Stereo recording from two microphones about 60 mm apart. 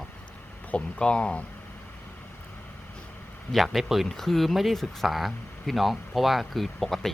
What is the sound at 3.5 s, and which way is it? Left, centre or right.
Speech, centre.